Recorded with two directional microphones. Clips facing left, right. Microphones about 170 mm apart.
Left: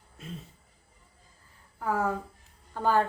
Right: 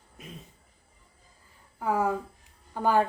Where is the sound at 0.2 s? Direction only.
15° right (ahead or behind).